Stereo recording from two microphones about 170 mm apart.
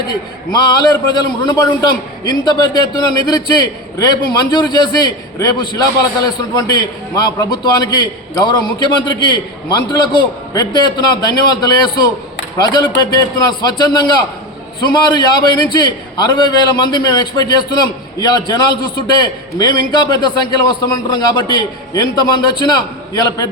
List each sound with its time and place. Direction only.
0.1 s a man's voice: 25° left (ahead or behind)